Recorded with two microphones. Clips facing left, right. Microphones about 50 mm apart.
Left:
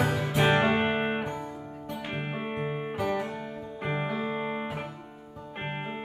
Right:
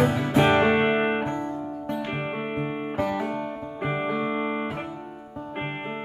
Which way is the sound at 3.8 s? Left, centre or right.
Centre.